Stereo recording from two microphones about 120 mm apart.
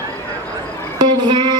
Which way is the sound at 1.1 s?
35° right (ahead or behind).